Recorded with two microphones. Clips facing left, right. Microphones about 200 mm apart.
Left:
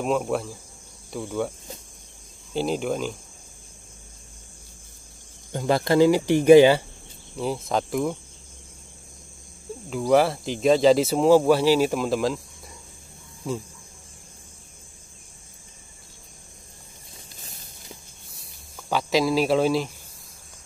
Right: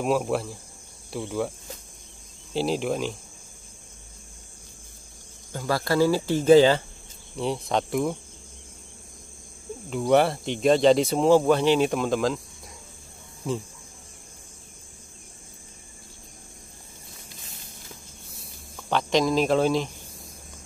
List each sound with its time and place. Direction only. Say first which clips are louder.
0.0 s speech: even; 5° right (ahead or behind)
2.5 s speech: even; centre (ahead or behind)
5.5 s speech: left 4 dB; 20° left (ahead or behind)
7.3 s speech: even; centre (ahead or behind)
9.8 s speech: left 1 dB; centre (ahead or behind)
18.9 s speech: even; 5° left (ahead or behind)